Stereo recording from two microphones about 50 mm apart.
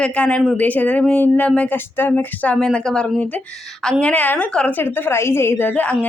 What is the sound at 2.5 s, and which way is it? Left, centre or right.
Speech, centre.